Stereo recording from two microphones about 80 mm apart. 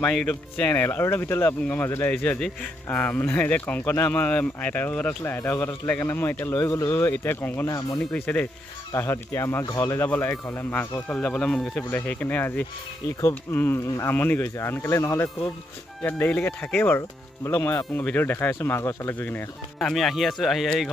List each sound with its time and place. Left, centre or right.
0.0 s speech: centre
0.7 s speech: left
2.1 s speech: centre
7.6 s speech: left
8.0 s speech: centre
8.9 s speech: left
10.5 s speech: left
11.9 s speech: left
17.6 s speech: left
17.9 s speech: left
19.8 s speech: centre